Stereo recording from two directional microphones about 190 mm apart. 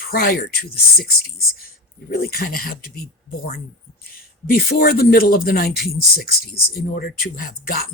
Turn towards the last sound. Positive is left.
turn(degrees=50)  # may be behind; listen again after turning